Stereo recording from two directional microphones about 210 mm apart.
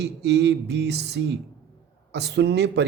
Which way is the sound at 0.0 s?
55° right (ahead or behind).